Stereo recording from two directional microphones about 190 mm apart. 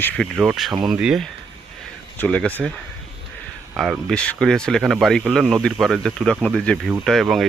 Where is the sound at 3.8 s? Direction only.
Centre (ahead or behind).